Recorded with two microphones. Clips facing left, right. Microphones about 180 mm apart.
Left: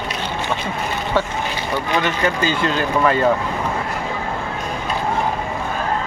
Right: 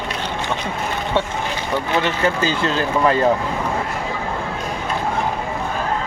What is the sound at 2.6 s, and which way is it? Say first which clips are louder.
Speech: even; 30° right (ahead or behind).